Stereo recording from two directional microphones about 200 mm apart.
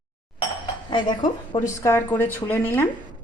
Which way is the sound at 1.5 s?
15° left (ahead or behind).